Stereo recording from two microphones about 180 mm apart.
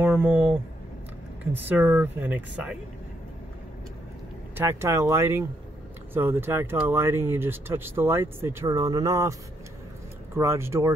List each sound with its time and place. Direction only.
0.0 s a sound: 10° right (ahead or behind)
1.4 s speech: 10° right (ahead or behind)
4.6 s speech: 15° right (ahead or behind)